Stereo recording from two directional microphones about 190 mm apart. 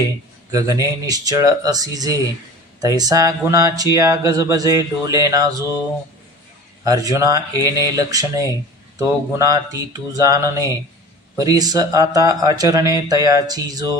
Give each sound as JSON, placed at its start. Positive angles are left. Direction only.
{"t": 0.5, "sound": "a man's voice", "side_deg": -20}
{"t": 6.8, "sound": "speech", "side_deg": -20}